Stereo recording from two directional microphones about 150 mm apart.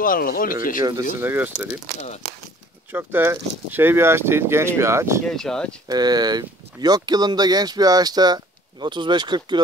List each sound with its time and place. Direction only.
0.0 s speech: 70° left (ahead or behind)
1.2 s speech: 15° right (ahead or behind)
2.9 s speech: 15° right (ahead or behind)
5.2 s speech: 5° left (ahead or behind)
5.9 s speech: 25° right (ahead or behind)